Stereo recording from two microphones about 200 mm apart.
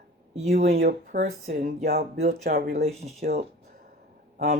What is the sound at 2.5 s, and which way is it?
Speech, 50° right (ahead or behind).